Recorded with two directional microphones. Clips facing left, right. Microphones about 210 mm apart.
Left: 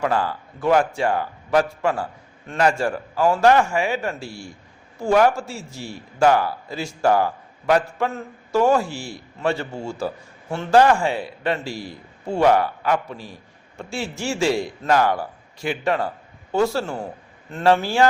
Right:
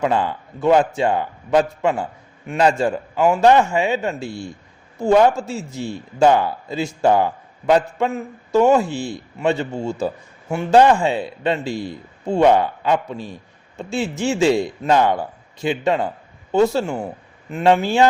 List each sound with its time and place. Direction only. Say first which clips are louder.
0.0 s a man's voice: right 3 dB; 20° right (ahead or behind)